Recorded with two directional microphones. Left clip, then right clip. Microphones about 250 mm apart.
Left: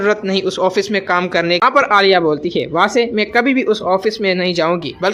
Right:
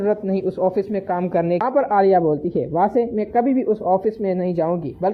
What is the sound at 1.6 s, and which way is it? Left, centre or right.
A man's voice, centre.